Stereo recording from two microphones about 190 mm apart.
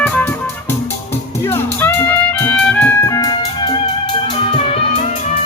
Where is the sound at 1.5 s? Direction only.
10° left (ahead or behind).